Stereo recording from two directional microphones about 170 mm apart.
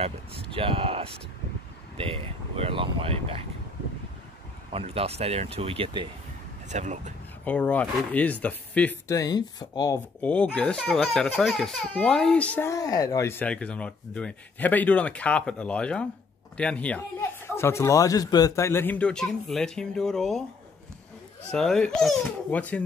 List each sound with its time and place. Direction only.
0.0 s speech: 35° right (ahead or behind)
2.0 s a sound: 30° right (ahead or behind)
4.7 s speech: 35° right (ahead or behind)
6.7 s speech: 45° right (ahead or behind)
7.4 s speech: 10° left (ahead or behind)
9.1 s speech: 20° left (ahead or behind)
10.2 s speech: 5° left (ahead or behind)
21.5 s speech: 5° left (ahead or behind)